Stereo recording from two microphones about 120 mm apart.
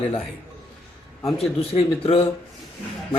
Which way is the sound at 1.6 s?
55° left (ahead or behind).